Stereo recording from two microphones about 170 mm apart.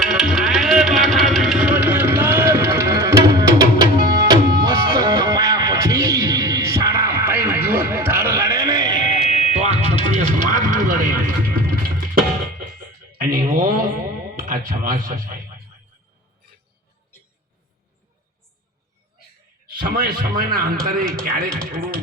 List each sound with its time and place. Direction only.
0.0 s music: 5° right (ahead or behind); by 9.2 s 25° right (ahead or behind)
9.3 s fire alarm: 40° right (ahead or behind)
10.2 s vehicle: 45° right (ahead or behind)
11.5 s music: 60° right (ahead or behind)
13.1 s a sound: 60° right (ahead or behind)
19.8 s a man's voice: 60° right (ahead or behind)